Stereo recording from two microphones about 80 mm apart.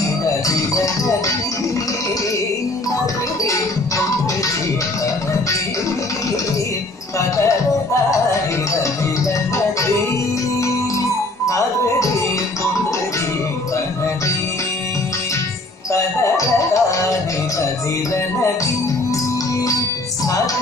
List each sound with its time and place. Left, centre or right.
0.5 s music: left
7.2 s music: left
11.4 s music: left
15.9 s music: left